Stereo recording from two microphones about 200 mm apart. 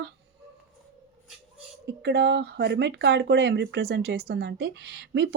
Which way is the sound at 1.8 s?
55° right (ahead or behind).